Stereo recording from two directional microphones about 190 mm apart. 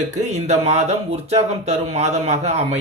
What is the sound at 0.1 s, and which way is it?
Speech, 35° right (ahead or behind).